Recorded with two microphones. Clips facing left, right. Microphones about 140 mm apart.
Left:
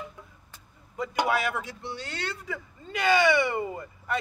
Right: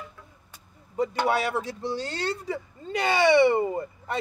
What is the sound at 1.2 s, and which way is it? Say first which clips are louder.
Speech: even; 30° right (ahead or behind).